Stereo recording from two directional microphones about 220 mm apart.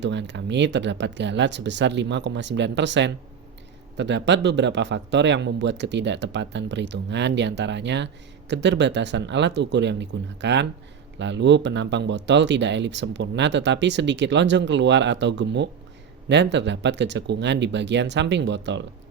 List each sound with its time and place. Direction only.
0.0 s a man's voice: 55° right (ahead or behind)